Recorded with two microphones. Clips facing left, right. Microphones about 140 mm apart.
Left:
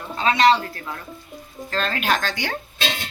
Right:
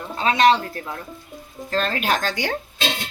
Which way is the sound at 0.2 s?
35° right (ahead or behind).